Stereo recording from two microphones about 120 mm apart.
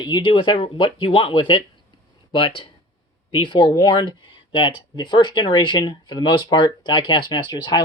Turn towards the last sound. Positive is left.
turn(degrees=35)  # may be behind; listen again after turning